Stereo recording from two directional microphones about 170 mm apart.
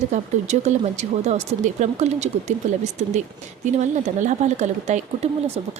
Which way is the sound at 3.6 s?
45° right (ahead or behind).